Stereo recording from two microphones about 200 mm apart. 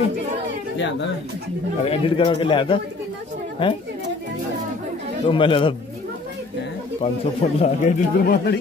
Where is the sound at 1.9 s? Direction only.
25° left (ahead or behind).